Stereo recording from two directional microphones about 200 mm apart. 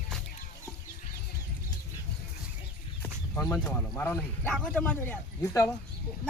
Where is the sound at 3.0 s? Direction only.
10° left (ahead or behind).